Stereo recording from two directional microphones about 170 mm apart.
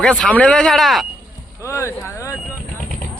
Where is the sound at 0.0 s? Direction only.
5° left (ahead or behind).